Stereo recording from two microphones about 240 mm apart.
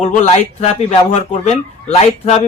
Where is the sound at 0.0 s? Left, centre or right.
Left.